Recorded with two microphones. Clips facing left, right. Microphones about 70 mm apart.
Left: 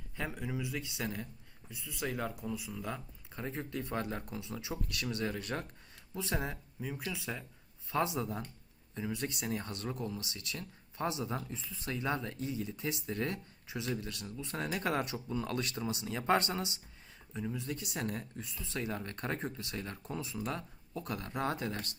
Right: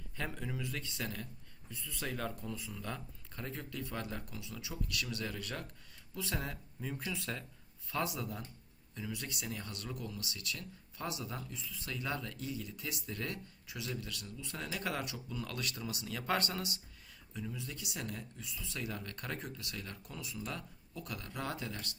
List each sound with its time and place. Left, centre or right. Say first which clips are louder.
0.2 s speech: left 2 dB; centre
7.1 s speech: even; centre
7.9 s speech: left 4 dB; left